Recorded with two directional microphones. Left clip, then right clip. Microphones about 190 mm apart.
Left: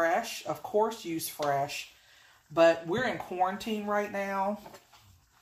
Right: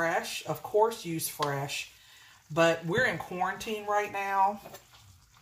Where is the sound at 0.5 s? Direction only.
15° left (ahead or behind).